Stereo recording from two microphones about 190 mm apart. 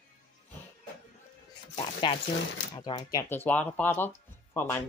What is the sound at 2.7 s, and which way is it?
Speech, 25° left (ahead or behind).